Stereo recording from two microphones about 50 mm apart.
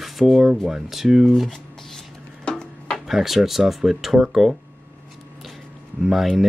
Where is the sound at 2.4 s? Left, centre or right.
Centre.